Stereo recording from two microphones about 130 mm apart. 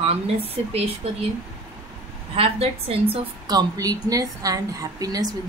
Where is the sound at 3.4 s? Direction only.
30° right (ahead or behind).